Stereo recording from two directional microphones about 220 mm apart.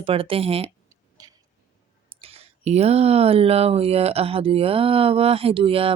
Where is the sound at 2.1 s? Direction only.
25° right (ahead or behind).